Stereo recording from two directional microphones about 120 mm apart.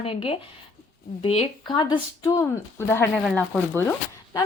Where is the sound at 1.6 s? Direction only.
40° left (ahead or behind); by 3.9 s 15° left (ahead or behind).